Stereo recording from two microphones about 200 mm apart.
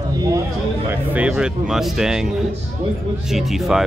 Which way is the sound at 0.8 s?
10° right (ahead or behind).